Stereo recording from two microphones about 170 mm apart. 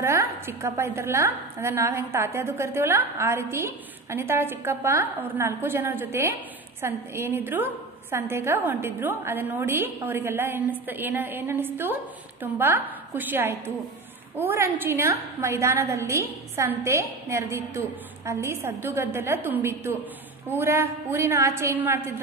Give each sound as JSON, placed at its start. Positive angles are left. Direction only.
{"t": 0.0, "sound": "a woman's voice", "side_deg": -15}